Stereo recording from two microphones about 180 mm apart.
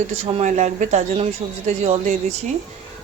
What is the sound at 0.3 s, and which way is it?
Speech, 40° right (ahead or behind).